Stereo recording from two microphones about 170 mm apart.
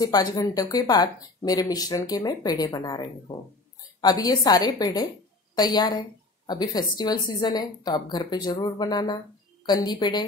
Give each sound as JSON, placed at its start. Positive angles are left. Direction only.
{"t": 0.0, "sound": "speech", "side_deg": 20}